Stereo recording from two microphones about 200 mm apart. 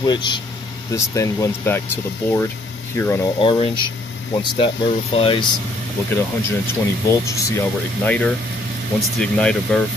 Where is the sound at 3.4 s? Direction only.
25° left (ahead or behind).